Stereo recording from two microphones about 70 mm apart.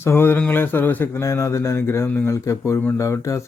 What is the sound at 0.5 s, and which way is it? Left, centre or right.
Speech, left.